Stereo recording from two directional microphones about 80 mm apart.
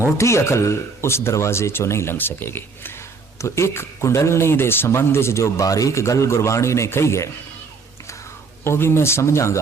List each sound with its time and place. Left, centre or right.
0.2 s speech: left
8.6 s speech: left